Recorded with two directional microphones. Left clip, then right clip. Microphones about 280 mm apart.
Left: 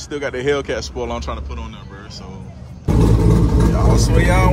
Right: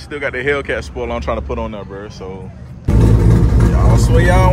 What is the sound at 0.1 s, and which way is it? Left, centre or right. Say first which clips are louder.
Speech: right 2 dB; centre.